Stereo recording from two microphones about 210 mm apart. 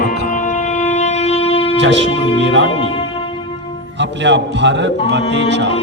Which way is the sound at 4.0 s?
55° right (ahead or behind).